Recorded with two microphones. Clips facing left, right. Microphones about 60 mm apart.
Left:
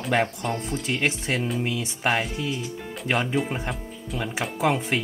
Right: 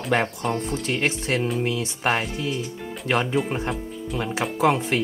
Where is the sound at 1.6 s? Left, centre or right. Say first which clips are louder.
Right 2 dB; right.